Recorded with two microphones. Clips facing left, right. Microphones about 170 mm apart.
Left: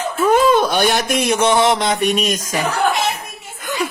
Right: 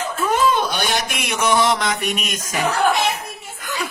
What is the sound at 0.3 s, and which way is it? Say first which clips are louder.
Speech: left 6 dB; 50° left (ahead or behind).